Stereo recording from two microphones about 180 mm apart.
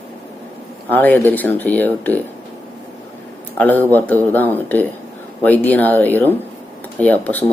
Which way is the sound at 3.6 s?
10° left (ahead or behind).